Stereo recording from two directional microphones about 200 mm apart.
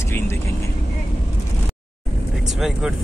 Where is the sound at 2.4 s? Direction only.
Centre (ahead or behind).